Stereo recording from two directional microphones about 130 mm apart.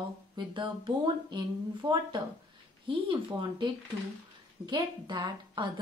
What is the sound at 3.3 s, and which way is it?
Speech, 35° right (ahead or behind).